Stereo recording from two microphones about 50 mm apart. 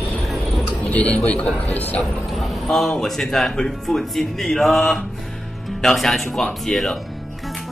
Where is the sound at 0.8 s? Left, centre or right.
Left.